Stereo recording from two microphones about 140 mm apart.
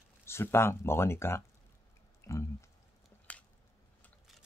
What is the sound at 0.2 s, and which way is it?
Speech, 20° left (ahead or behind).